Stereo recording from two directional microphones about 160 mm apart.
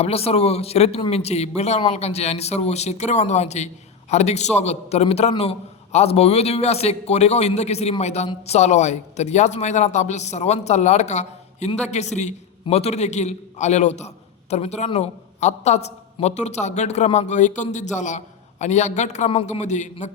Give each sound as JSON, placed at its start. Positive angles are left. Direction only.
{"t": 0.0, "sound": "a man's voice", "side_deg": 40}